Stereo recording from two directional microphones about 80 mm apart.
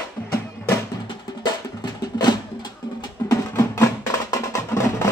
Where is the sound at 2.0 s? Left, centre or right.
Left.